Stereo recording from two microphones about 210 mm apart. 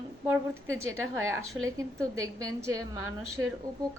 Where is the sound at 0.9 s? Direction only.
70° right (ahead or behind).